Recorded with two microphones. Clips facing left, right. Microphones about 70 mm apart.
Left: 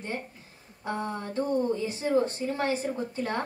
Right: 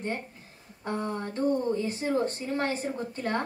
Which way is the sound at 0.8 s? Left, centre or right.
Right.